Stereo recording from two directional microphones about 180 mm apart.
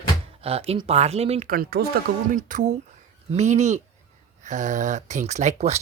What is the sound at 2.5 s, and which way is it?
Speech, 45° right (ahead or behind).